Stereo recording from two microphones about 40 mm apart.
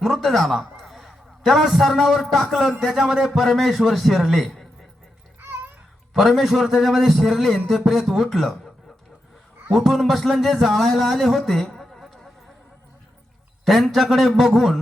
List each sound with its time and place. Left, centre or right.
0.0 s a sound: centre
2.3 s a man's voice: centre
5.4 s babbling: right
6.1 s a man's voice: centre
13.7 s a man's voice: centre